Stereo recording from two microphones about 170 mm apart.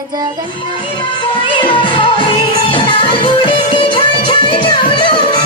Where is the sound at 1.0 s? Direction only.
30° left (ahead or behind).